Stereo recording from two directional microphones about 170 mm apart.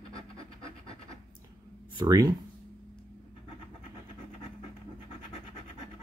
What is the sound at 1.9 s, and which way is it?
Speech, 20° right (ahead or behind).